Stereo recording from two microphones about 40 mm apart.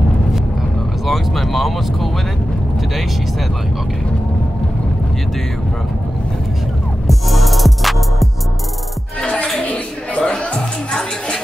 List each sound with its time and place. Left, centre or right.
1.0 s speech: centre
7.1 s music: centre
9.4 s music: left